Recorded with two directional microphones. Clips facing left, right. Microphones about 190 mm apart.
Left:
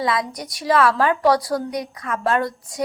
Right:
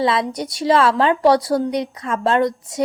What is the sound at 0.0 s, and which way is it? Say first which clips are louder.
A woman's voice: right 4 dB; 25° right (ahead or behind).